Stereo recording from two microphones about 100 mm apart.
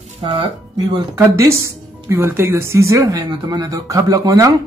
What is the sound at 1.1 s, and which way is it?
Speech, 30° right (ahead or behind).